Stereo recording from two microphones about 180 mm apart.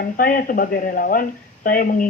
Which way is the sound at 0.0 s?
50° left (ahead or behind).